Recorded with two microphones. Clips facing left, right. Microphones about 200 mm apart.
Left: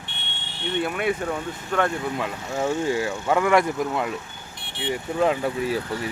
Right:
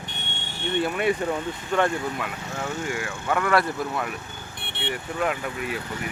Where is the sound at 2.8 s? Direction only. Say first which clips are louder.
Left 5 dB; 25° left (ahead or behind).